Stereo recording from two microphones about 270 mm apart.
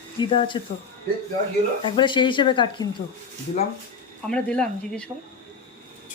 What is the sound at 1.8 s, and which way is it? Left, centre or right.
Speech, centre.